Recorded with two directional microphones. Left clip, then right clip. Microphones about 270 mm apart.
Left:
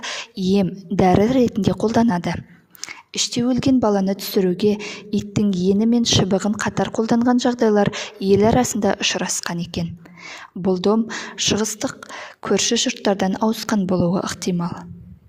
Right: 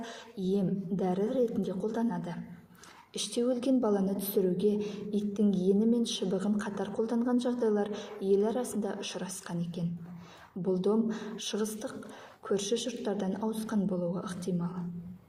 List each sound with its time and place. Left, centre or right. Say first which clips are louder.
0.0 s a woman's voice: left 12 dB; left